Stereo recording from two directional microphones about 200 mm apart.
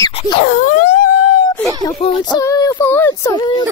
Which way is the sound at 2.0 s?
30° left (ahead or behind).